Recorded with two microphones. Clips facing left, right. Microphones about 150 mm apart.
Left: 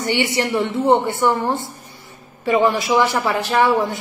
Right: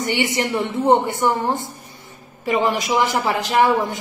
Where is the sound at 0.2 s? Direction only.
20° right (ahead or behind).